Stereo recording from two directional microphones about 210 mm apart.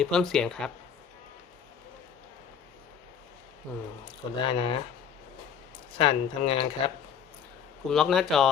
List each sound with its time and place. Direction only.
0.0 s speech: centre (ahead or behind)
4.4 s speech: 25° left (ahead or behind)
6.0 s speech: 25° left (ahead or behind)
7.9 s speech: centre (ahead or behind)